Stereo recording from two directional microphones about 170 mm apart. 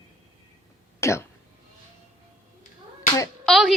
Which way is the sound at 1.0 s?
15° left (ahead or behind).